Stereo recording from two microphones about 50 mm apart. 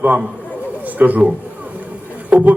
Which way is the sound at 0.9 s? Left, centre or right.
Right.